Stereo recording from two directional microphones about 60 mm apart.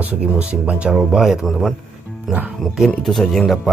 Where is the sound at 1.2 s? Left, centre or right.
Centre.